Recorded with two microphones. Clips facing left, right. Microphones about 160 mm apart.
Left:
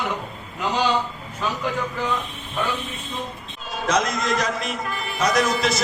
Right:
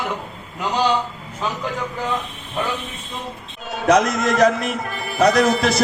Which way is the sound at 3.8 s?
60° right (ahead or behind).